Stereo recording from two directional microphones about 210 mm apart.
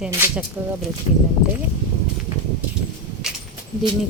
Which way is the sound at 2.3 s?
20° right (ahead or behind).